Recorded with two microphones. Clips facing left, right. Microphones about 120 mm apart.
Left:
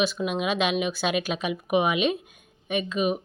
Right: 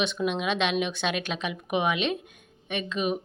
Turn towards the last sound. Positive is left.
turn(degrees=5)  # may be behind; listen again after turning